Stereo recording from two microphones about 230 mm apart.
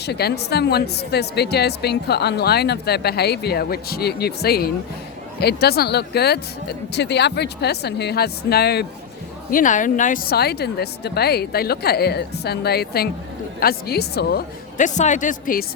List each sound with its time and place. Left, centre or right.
0.0 s a woman's voice: left